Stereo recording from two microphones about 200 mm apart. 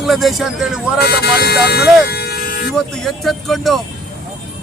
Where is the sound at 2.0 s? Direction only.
55° left (ahead or behind).